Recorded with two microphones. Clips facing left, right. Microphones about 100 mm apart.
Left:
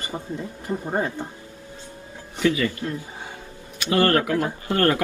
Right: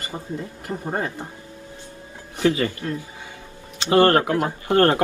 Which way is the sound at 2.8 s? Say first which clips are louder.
Right 1 dB; 25° left (ahead or behind).